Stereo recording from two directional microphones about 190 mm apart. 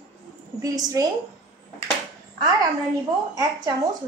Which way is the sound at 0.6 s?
15° right (ahead or behind).